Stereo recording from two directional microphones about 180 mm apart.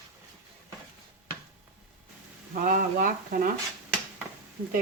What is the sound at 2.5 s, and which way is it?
Speech, 50° right (ahead or behind).